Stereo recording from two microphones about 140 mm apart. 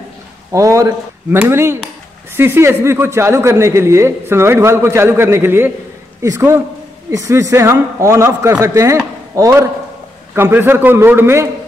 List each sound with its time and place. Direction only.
0.5 s a man's voice: 20° right (ahead or behind)